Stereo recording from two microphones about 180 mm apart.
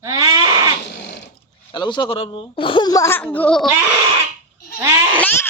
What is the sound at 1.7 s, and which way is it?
Speech, 25° left (ahead or behind).